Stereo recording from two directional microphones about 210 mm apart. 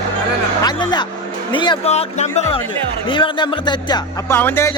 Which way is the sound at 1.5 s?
25° left (ahead or behind).